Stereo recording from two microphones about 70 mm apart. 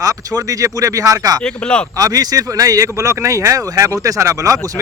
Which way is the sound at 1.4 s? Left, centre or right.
Centre.